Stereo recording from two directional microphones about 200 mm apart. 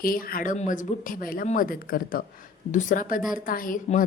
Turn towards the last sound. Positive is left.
turn(degrees=40)  # may be behind; listen again after turning